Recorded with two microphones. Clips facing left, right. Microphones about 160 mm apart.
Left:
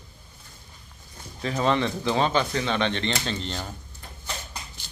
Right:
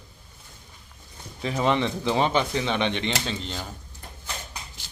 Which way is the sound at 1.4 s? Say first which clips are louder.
Even; 15° right (ahead or behind).